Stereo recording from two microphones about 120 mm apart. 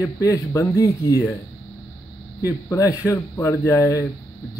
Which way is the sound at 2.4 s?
25° left (ahead or behind).